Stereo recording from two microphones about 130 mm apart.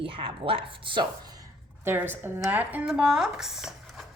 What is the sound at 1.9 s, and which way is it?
A woman's voice, 15° right (ahead or behind).